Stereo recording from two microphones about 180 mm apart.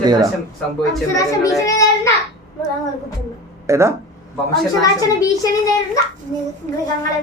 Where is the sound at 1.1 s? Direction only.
20° left (ahead or behind).